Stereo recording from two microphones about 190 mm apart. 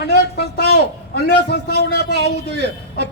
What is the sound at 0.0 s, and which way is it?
A man's voice, 60° left (ahead or behind).